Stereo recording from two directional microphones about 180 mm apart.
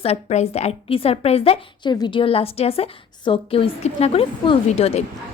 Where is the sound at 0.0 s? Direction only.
35° left (ahead or behind).